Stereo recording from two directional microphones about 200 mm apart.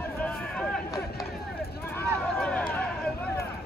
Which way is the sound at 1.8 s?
10° left (ahead or behind).